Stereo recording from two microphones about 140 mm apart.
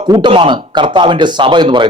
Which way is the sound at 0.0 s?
35° right (ahead or behind).